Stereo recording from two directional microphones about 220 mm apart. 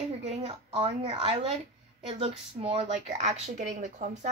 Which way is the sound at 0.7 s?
25° right (ahead or behind).